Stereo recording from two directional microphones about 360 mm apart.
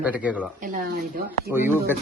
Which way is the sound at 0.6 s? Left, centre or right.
Right.